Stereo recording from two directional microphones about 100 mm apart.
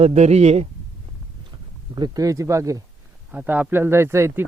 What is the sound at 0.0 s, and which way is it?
Speech, 90° right.